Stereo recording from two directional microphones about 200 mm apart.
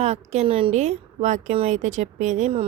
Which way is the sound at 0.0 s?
35° right (ahead or behind).